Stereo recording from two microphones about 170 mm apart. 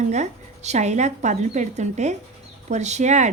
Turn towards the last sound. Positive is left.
turn(degrees=-45)  # may be behind; listen again after turning